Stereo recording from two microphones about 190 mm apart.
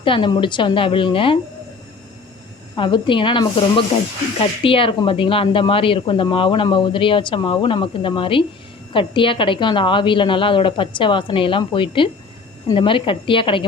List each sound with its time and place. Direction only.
0.0 s speech: 25° left (ahead or behind)
2.7 s speech: 25° left (ahead or behind)